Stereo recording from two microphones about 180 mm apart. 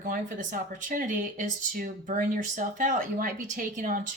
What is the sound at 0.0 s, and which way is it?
Speech, 45° right (ahead or behind).